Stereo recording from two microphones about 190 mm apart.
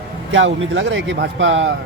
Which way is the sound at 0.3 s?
80° right.